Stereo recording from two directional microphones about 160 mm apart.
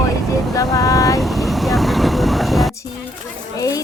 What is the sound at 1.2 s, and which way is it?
Vehicle, centre (ahead or behind).